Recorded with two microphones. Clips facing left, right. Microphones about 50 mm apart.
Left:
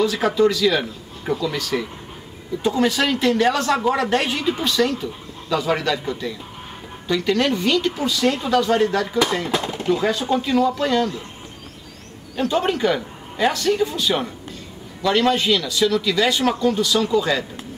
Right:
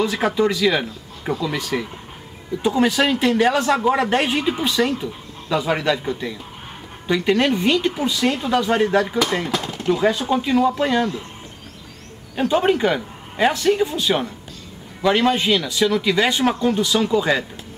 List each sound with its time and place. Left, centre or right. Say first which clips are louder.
0.0 s speech: left 1 dB; centre
9.5 s a sound: left 1 dB; centre
9.8 s speech: right 2 dB; centre
12.4 s speech: right 2 dB; centre